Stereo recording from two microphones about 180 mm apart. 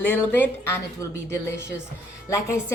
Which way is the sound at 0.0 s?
10° left (ahead or behind).